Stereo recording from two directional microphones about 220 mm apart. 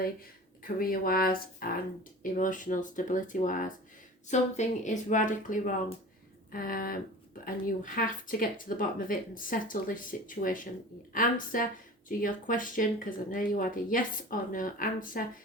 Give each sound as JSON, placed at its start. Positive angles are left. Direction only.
{"t": 0.6, "sound": "speech", "side_deg": 40}